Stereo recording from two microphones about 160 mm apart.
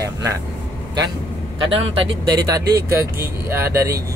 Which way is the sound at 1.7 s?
35° right (ahead or behind).